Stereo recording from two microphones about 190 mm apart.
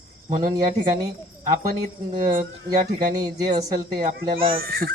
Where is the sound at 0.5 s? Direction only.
20° right (ahead or behind).